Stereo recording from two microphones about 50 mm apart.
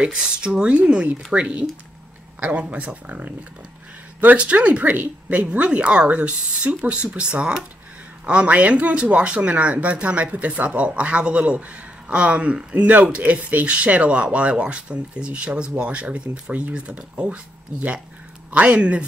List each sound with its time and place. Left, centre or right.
0.0 s speech: centre
2.7 s speech: right